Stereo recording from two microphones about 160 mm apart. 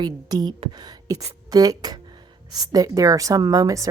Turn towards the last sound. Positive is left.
turn(degrees=-20)  # may be behind; listen again after turning